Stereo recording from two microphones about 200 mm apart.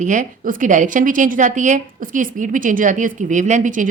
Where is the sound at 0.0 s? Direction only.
40° right (ahead or behind).